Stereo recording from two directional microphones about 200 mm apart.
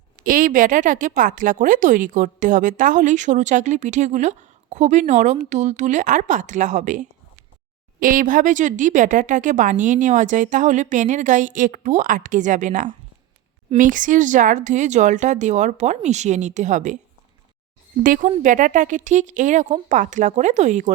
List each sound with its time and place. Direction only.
0.3 s a woman's voice: 45° right (ahead or behind)
18.0 s a woman's voice: 40° right (ahead or behind)